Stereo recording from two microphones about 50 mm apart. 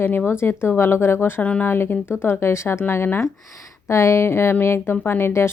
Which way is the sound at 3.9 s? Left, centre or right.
Left.